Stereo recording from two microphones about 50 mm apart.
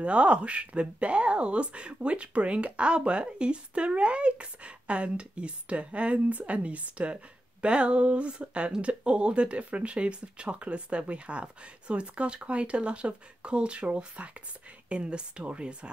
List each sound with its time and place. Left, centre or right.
0.0 s speech: right